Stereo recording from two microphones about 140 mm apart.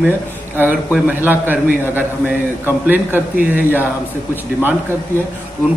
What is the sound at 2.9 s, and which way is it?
Speech, 15° right (ahead or behind).